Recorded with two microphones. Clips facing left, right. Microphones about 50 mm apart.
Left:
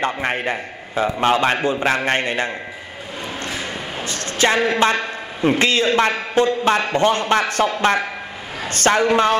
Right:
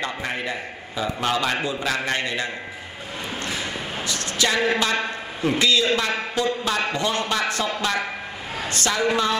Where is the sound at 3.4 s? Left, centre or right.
Left.